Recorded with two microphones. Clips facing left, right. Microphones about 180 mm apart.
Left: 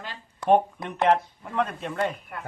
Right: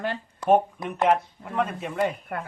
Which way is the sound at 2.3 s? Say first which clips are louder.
Right 6 dB; 60° right (ahead or behind).